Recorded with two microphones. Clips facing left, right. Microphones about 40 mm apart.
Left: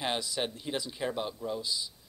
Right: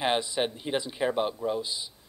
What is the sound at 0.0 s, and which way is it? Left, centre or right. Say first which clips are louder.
Speech: right 6 dB; right.